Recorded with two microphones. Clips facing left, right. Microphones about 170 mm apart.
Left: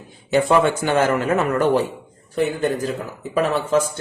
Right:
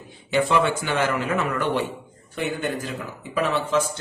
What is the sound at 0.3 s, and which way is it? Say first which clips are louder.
A man's voice: left 4 dB; 45° left (ahead or behind).